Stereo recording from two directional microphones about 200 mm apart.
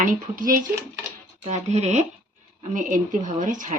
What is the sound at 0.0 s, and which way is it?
Speech, 45° right (ahead or behind).